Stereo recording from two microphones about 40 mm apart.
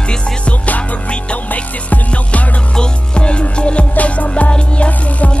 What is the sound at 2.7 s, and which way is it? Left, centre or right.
Music, left.